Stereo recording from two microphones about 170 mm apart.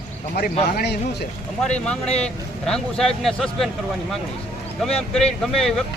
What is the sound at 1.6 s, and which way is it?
Speech, 5° left (ahead or behind).